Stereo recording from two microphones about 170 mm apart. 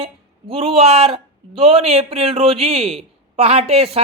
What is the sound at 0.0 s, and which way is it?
Speech, 35° right (ahead or behind).